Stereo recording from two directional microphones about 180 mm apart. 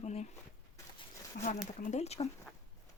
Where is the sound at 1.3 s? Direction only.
40° left (ahead or behind).